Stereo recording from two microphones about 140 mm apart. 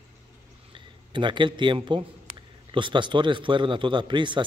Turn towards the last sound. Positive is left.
turn(degrees=-35)  # may be behind; listen again after turning